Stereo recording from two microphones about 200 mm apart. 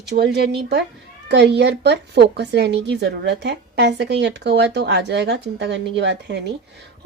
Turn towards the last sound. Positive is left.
turn(degrees=-60)  # may be behind; listen again after turning